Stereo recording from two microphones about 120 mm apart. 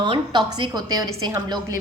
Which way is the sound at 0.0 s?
40° right (ahead or behind).